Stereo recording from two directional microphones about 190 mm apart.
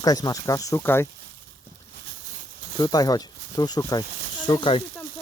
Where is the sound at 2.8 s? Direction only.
20° left (ahead or behind).